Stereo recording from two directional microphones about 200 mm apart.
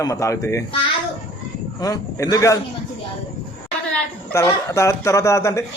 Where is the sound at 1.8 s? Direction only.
20° left (ahead or behind).